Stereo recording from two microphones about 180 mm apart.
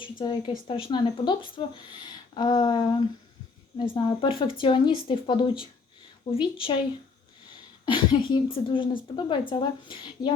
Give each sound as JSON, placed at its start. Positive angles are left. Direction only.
{"t": 0.0, "sound": "speech", "side_deg": 25}
{"t": 7.9, "sound": "speech", "side_deg": 25}